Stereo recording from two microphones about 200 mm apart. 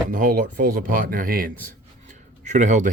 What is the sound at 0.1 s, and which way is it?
Speech, 40° right (ahead or behind).